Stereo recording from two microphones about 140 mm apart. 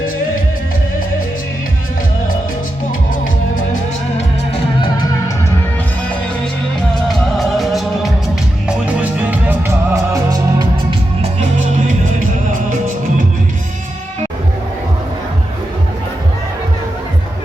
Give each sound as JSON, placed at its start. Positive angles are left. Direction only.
{"t": 7.1, "sound": "music of bollywood", "side_deg": 0}
{"t": 8.6, "sound": "music", "side_deg": -5}
{"t": 9.5, "sound": "music", "side_deg": -20}